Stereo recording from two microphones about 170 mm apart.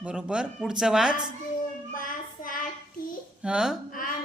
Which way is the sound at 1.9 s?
55° left (ahead or behind).